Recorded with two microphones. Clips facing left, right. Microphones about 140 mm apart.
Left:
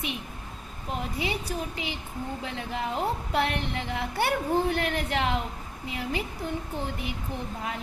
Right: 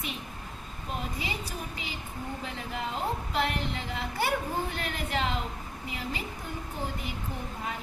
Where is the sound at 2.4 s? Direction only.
65° left (ahead or behind).